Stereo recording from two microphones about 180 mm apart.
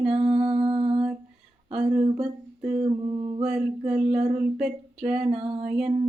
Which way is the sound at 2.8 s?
30° right (ahead or behind).